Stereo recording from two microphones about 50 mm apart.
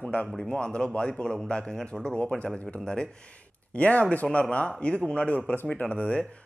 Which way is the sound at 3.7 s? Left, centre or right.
Left.